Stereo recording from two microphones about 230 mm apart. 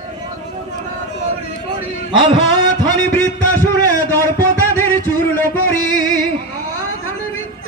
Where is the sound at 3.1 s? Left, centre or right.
Centre.